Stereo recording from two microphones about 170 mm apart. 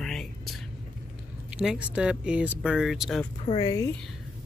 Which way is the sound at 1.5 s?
5° right (ahead or behind).